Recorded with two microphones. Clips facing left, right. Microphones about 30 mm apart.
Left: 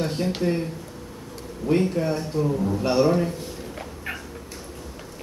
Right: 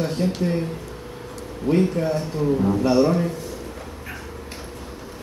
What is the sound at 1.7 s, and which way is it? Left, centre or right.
Speech, right.